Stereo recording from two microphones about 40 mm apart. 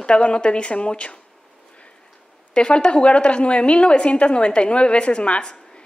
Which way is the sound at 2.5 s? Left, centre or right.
Left.